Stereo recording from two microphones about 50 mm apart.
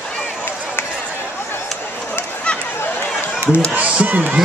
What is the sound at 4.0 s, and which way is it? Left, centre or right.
Speech, right.